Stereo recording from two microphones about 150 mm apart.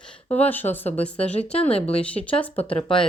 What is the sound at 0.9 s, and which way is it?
Speech, 45° left (ahead or behind).